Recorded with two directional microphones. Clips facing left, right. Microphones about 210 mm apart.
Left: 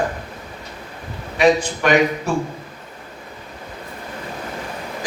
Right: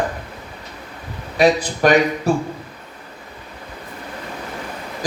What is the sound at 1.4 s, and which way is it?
Speech, 35° right (ahead or behind).